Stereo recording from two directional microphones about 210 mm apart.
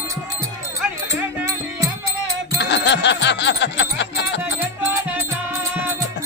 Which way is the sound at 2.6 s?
55° left (ahead or behind).